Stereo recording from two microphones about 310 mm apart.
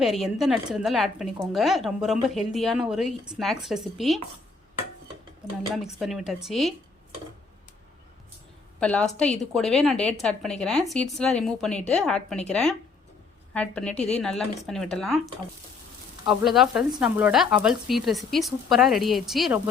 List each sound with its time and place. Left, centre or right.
0.0 s speech: centre
5.7 s speech: centre
8.8 s a woman's voice: centre
13.9 s a woman's voice: left
14.2 s speech: centre
16.2 s speech: centre